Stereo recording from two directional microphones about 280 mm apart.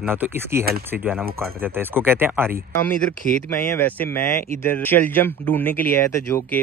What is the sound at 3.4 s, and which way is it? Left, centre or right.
Speech, centre.